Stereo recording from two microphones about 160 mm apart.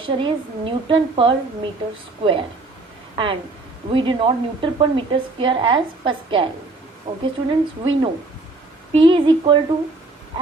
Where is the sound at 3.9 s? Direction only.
30° right (ahead or behind).